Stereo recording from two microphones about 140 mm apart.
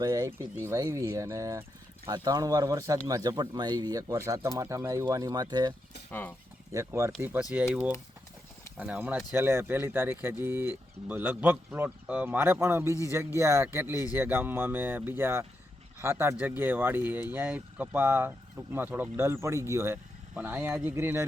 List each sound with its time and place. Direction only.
0.0 s speech: 25° right (ahead or behind)
6.1 s speech: 15° left (ahead or behind)
6.7 s speech: 20° right (ahead or behind)